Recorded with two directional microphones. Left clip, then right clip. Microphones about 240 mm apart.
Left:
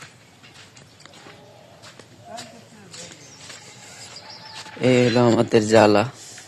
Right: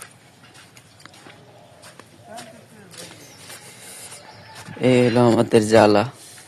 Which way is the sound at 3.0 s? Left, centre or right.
Right.